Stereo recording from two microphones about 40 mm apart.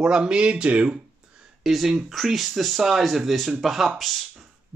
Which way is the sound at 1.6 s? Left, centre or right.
Centre.